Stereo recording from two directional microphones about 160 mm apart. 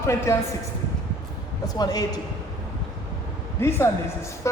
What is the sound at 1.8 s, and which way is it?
Speech, 25° left (ahead or behind).